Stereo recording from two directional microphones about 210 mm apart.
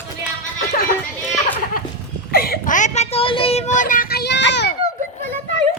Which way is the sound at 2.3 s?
45° left (ahead or behind).